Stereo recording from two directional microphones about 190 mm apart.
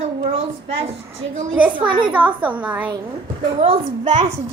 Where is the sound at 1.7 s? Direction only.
25° right (ahead or behind).